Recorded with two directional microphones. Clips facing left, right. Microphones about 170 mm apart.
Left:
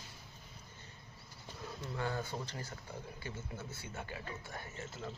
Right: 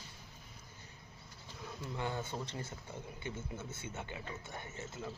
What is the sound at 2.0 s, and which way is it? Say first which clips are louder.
Speech: left 1 dB; 20° right (ahead or behind).